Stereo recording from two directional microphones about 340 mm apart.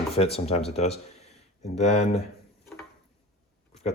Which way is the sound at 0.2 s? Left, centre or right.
Centre.